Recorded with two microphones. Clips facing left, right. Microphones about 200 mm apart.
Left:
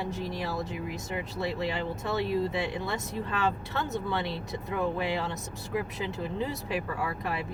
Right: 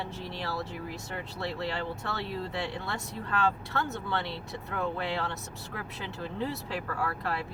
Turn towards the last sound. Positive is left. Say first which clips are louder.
# even
turn(degrees=15)  # may be behind; listen again after turning